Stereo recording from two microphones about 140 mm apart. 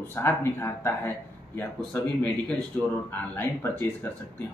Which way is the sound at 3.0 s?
15° left (ahead or behind).